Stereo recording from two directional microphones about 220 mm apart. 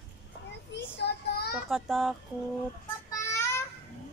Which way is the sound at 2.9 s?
15° left (ahead or behind).